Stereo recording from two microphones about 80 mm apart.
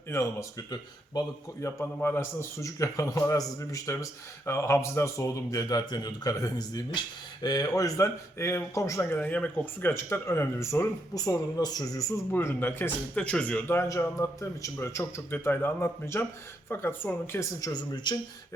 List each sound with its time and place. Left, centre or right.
0.1 s a man's voice: left
1.8 s a man's voice: left
7.8 s a man's voice: left
9.0 s speech: centre
9.9 s a man's voice: left
11.1 s a woman's voice: left
12.3 s speech: left
14.2 s a man's voice: left
17.6 s a man's voice: left